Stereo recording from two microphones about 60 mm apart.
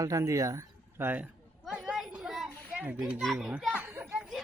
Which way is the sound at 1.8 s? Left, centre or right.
Centre.